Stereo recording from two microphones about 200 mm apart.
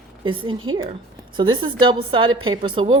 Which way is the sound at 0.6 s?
90° right.